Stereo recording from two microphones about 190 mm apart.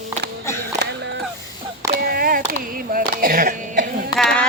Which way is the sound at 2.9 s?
50° right (ahead or behind).